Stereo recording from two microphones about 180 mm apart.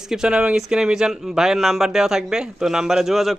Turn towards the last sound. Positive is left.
turn(degrees=0)  # may be behind; listen again after turning